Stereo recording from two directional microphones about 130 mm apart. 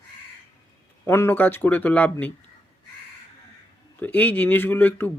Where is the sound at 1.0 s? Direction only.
20° left (ahead or behind).